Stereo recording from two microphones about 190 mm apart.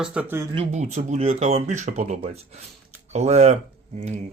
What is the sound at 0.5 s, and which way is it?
Speech, 35° right (ahead or behind).